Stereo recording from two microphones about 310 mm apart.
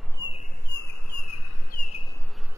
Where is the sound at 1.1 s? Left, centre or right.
Left.